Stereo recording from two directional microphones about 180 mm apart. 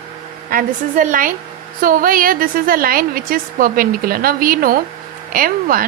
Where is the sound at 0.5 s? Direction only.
50° right (ahead or behind).